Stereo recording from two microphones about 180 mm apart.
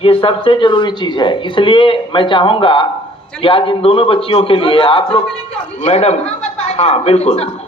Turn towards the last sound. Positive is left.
turn(degrees=35)  # may be behind; listen again after turning